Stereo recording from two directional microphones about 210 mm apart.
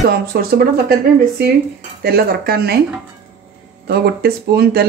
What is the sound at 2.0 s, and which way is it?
Speech, 50° right (ahead or behind).